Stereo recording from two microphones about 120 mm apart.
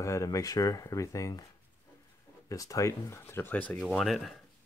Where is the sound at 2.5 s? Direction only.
30° left (ahead or behind).